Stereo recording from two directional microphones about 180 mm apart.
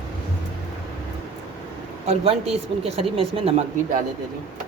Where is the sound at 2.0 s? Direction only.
35° right (ahead or behind).